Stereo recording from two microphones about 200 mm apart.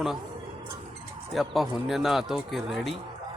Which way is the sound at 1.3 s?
Centre (ahead or behind).